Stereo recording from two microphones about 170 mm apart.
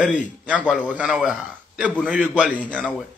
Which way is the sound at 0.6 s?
5° left (ahead or behind).